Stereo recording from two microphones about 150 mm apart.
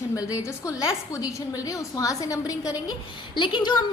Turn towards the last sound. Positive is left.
turn(degrees=30)  # may be behind; listen again after turning